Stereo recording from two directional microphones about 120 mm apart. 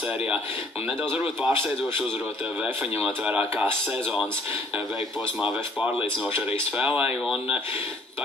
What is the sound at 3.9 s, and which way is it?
Speech, 5° right (ahead or behind).